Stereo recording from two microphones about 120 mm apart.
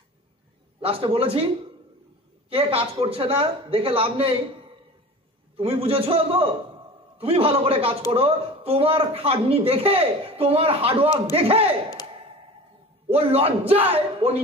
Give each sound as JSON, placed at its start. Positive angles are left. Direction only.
{"t": 0.7, "sound": "speech", "side_deg": -50}
{"t": 2.5, "sound": "speech", "side_deg": -50}
{"t": 5.6, "sound": "speech", "side_deg": -50}
{"t": 13.1, "sound": "a man's voice", "side_deg": -55}